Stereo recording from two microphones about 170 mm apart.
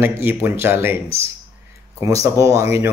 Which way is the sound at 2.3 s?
20° right (ahead or behind).